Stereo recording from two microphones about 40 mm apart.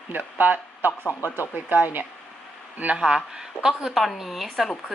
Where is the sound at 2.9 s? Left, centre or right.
Right.